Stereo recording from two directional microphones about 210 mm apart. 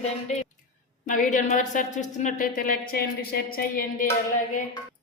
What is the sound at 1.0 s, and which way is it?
A woman's voice, 40° left (ahead or behind).